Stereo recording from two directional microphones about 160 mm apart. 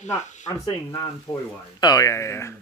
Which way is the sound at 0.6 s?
20° left (ahead or behind).